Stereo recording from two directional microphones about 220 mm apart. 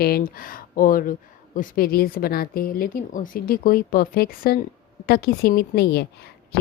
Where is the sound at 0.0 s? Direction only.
40° left (ahead or behind).